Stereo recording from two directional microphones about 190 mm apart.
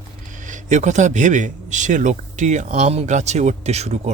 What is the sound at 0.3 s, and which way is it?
A man's voice, 40° right (ahead or behind).